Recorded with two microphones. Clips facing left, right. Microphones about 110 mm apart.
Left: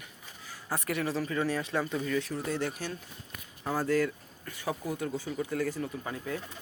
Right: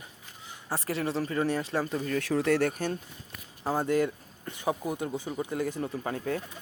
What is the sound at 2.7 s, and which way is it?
Speech, 50° right (ahead or behind).